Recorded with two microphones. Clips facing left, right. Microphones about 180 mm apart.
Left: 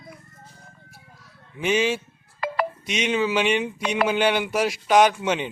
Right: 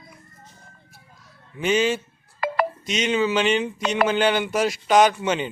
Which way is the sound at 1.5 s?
5° left (ahead or behind).